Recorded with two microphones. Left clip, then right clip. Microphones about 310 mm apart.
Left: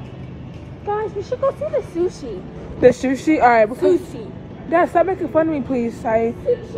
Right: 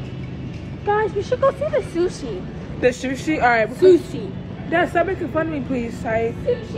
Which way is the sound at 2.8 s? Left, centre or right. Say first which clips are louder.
Left 6 dB; left.